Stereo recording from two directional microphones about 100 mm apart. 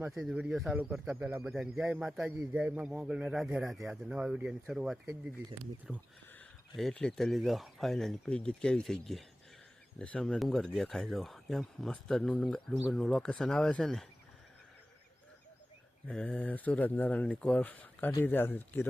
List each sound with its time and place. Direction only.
0.1 s speech: 5° right (ahead or behind)
6.7 s speech: 5° left (ahead or behind)
16.0 s speech: 10° left (ahead or behind)